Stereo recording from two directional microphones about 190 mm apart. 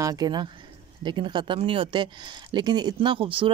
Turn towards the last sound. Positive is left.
turn(degrees=-30)  # may be behind; listen again after turning